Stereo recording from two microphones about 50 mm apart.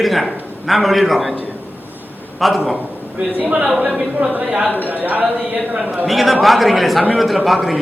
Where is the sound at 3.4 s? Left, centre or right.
Right.